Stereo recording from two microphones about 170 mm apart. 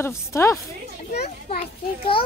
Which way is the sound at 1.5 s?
35° left (ahead or behind).